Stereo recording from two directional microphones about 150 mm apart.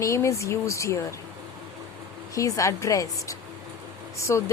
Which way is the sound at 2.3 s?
20° left (ahead or behind).